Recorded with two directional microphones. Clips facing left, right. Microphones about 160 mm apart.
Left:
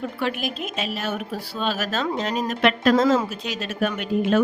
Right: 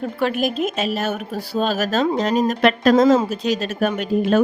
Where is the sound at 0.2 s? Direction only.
45° right (ahead or behind).